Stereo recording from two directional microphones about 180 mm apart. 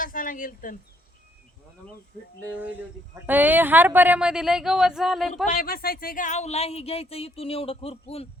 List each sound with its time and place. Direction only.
0.0 s speech: 50° left (ahead or behind)
3.2 s a woman's voice: 10° right (ahead or behind)
5.5 s speech: 55° left (ahead or behind); by 8.3 s 35° left (ahead or behind)